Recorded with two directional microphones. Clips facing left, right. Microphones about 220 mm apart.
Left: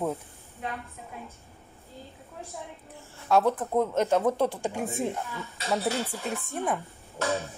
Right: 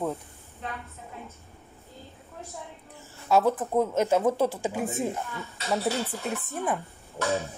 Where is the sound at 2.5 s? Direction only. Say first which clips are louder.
Left 1 dB; centre (ahead or behind).